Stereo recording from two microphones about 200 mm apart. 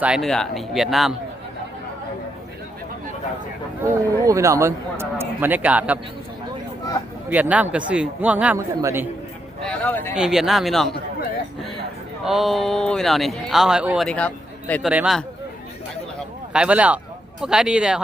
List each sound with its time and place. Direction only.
0.0 s speech: centre (ahead or behind)
3.8 s a man's voice: 15° right (ahead or behind)
7.3 s a man's voice: 10° right (ahead or behind)
9.6 s a sound: 5° left (ahead or behind)
10.2 s speech: centre (ahead or behind)
12.2 s speech: centre (ahead or behind)
14.8 s speech: 5° right (ahead or behind)
16.5 s a man's voice: 5° right (ahead or behind)